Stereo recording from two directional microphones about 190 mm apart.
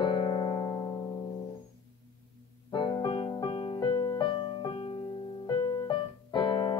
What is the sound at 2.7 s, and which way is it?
Music, 25° left (ahead or behind).